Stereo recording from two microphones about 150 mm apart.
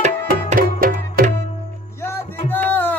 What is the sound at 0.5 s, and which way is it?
Music, 75° right (ahead or behind).